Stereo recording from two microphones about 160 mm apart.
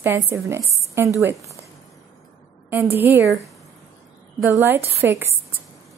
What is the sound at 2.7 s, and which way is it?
Speech, 10° right (ahead or behind).